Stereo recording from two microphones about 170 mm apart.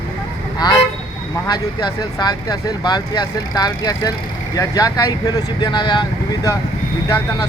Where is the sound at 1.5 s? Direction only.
25° left (ahead or behind).